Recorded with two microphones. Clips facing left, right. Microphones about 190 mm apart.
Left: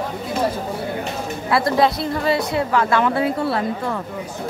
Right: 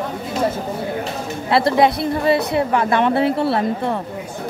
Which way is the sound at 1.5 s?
25° right (ahead or behind).